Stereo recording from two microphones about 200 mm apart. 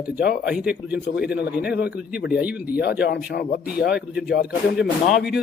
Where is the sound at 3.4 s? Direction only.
50° left (ahead or behind).